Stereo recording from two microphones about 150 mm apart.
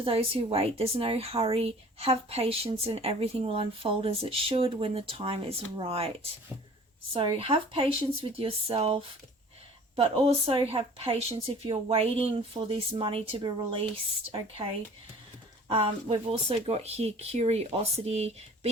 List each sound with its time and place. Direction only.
0.0 s speech: 40° right (ahead or behind)